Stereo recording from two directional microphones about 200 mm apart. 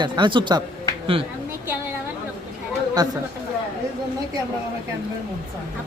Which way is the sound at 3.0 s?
20° right (ahead or behind).